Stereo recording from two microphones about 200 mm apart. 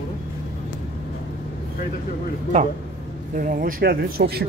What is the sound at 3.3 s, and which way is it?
Speech, 45° right (ahead or behind).